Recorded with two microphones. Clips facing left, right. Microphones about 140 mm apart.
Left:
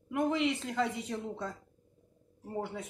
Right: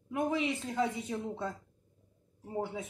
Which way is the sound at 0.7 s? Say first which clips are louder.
Even; centre (ahead or behind).